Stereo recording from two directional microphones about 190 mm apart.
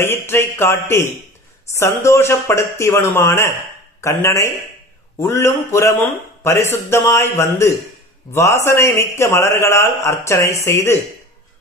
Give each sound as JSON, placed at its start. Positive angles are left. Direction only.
{"t": 0.0, "sound": "a man's voice", "side_deg": 15}